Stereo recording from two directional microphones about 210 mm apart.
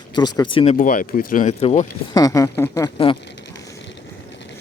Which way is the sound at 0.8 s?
40° left (ahead or behind).